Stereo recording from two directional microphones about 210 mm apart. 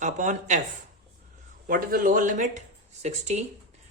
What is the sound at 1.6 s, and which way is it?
Speech, 40° right (ahead or behind).